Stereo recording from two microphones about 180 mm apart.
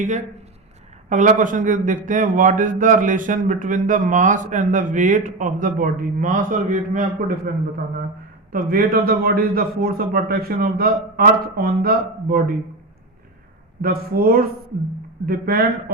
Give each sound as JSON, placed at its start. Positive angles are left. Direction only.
{"t": 1.1, "sound": "a man's voice", "side_deg": -45}
{"t": 8.5, "sound": "a man's voice", "side_deg": -50}
{"t": 13.8, "sound": "a man's voice", "side_deg": -55}